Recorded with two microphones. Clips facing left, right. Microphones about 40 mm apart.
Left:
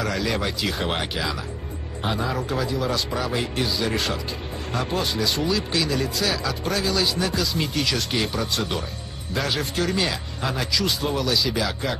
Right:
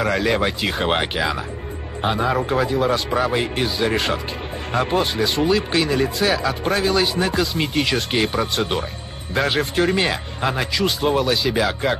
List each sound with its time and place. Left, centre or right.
0.0 s speech: right